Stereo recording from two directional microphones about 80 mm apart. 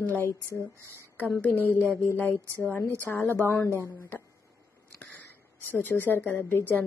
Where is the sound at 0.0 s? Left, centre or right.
Left.